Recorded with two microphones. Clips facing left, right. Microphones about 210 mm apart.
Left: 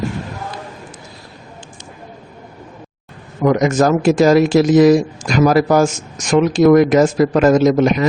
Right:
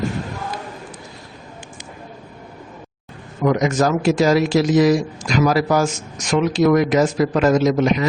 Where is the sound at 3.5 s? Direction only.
50° left (ahead or behind).